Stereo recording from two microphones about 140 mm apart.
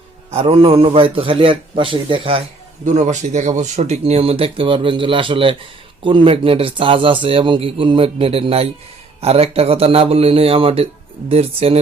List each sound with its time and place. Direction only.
0.3 s speech: 45° right (ahead or behind)
2.8 s speech: 60° right (ahead or behind)